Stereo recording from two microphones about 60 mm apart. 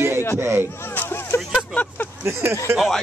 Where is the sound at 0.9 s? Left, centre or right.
Left.